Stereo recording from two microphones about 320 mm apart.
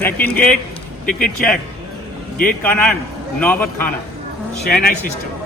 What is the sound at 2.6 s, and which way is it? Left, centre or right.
Speech, centre.